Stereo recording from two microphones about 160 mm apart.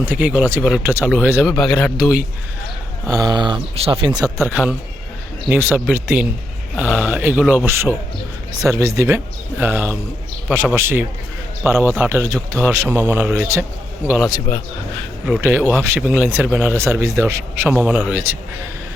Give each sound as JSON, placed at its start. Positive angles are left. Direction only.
{"t": 0.0, "sound": "a man's voice", "side_deg": -10}
{"t": 1.5, "sound": "a man's voice", "side_deg": 5}
{"t": 3.1, "sound": "speech", "side_deg": -25}
{"t": 4.4, "sound": "a man's voice", "side_deg": -5}
{"t": 14.5, "sound": "speech", "side_deg": 20}
{"t": 15.3, "sound": "a man's voice", "side_deg": -15}
{"t": 17.7, "sound": "a man's voice", "side_deg": -5}